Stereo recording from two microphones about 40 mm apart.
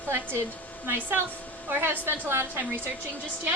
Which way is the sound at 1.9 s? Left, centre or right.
Right.